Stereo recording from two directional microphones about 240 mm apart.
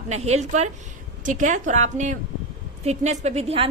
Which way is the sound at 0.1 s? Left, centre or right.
Right.